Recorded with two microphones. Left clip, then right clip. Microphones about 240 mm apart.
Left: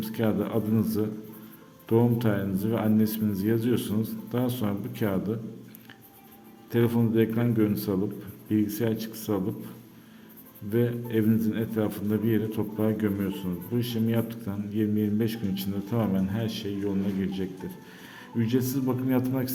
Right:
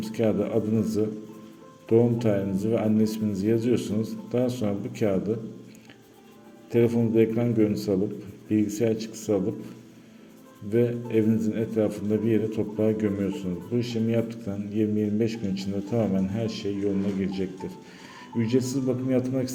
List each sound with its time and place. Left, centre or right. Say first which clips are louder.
0.0 s a man's voice: right 3 dB; centre
6.7 s a man's voice: right 3 dB; centre
10.7 s a man's voice: right 3 dB; centre